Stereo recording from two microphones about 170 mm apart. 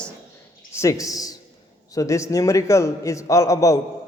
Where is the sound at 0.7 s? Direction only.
15° left (ahead or behind).